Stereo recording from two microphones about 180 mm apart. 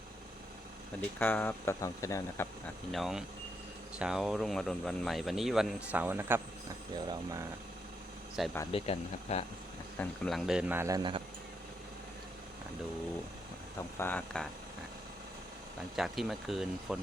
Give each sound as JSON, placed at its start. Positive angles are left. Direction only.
{"t": 1.2, "sound": "speech", "side_deg": 10}
{"t": 2.9, "sound": "speech", "side_deg": 0}
{"t": 8.4, "sound": "speech", "side_deg": 0}
{"t": 8.7, "sound": "speech", "side_deg": 35}
{"t": 10.0, "sound": "speech", "side_deg": 0}
{"t": 14.0, "sound": "speech", "side_deg": 10}
{"t": 16.0, "sound": "speech", "side_deg": 0}